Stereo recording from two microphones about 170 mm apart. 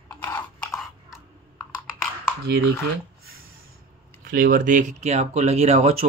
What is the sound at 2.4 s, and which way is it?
Speech, 75° right (ahead or behind).